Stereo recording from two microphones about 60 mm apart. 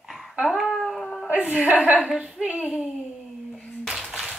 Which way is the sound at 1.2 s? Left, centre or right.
Right.